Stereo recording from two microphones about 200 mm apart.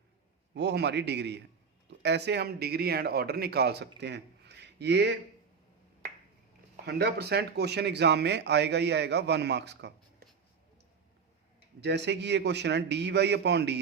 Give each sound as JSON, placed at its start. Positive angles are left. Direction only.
{"t": 0.5, "sound": "a man's voice", "side_deg": -60}
{"t": 6.8, "sound": "a man's voice", "side_deg": -55}
{"t": 11.8, "sound": "a man's voice", "side_deg": -55}